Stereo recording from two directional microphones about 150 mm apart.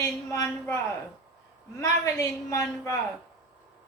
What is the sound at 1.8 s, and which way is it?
Speech, 20° left (ahead or behind).